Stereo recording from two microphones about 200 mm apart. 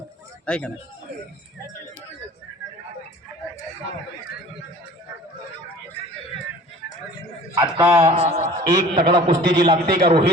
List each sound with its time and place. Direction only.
0.4 s speech: 5° left (ahead or behind)
7.5 s a man's voice: 20° right (ahead or behind)
8.1 s a man's voice: 35° right (ahead or behind)
8.7 s a man's voice: 20° right (ahead or behind)
9.8 s a man's voice: 50° right (ahead or behind)